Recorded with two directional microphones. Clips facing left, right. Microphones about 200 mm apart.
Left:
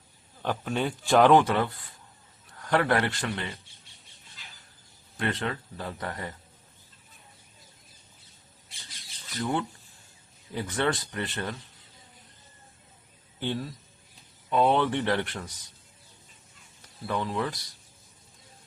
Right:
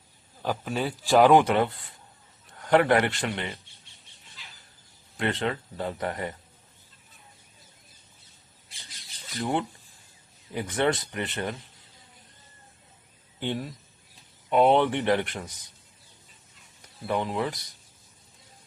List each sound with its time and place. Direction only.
0.4 s a man's voice: 5° right (ahead or behind); by 3.5 s 25° right (ahead or behind)
5.1 s speech: 20° right (ahead or behind)
9.4 s speech: 20° right (ahead or behind)
13.4 s a man's voice: 15° right (ahead or behind)
17.1 s speech: 20° right (ahead or behind)